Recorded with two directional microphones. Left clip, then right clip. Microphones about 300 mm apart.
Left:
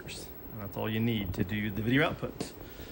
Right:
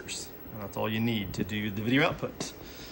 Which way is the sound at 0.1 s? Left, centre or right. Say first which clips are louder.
Right 4 dB; centre.